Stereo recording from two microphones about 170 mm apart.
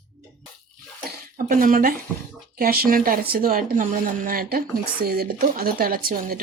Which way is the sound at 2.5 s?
60° right (ahead or behind).